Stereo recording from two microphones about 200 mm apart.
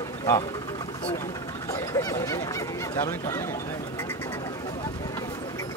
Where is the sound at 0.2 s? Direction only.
15° left (ahead or behind).